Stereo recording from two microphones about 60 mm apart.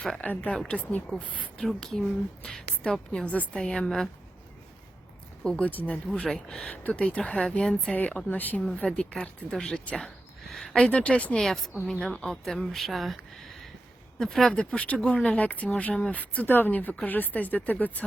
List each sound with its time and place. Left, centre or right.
0.2 s speech: left
1.6 s a woman's voice: centre
3.2 s speech: left
3.6 s a woman's voice: centre
5.4 s speech: centre
5.6 s speech: left
6.1 s a woman's voice: centre
7.6 s a woman's voice: centre
7.9 s a woman's voice: left
11.3 s speech: centre
14.5 s speech: centre